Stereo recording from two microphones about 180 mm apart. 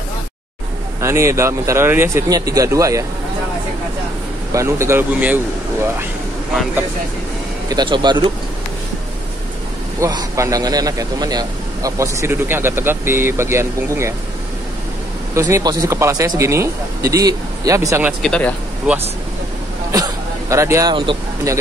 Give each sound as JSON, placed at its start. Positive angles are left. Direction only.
{"t": 1.0, "sound": "speech", "side_deg": -15}
{"t": 4.6, "sound": "speech", "side_deg": -15}
{"t": 7.7, "sound": "speech", "side_deg": -25}
{"t": 9.9, "sound": "speech", "side_deg": -15}
{"t": 15.3, "sound": "speech", "side_deg": -15}
{"t": 18.2, "sound": "speech", "side_deg": 5}
{"t": 19.9, "sound": "hubbub", "side_deg": -20}
{"t": 20.9, "sound": "speech", "side_deg": -30}